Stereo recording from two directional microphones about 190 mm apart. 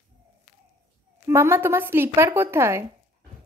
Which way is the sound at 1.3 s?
15° right (ahead or behind).